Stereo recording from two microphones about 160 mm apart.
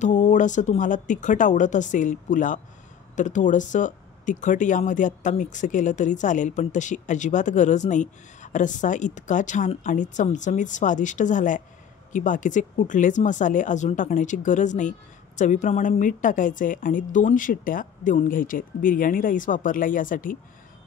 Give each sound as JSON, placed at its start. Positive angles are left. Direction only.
{"t": 0.0, "sound": "speech", "side_deg": 50}